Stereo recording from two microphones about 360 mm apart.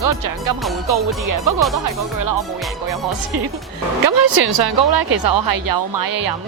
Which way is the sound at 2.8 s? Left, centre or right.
Right.